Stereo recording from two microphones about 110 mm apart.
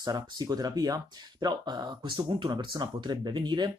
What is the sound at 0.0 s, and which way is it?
Speech, 40° right (ahead or behind).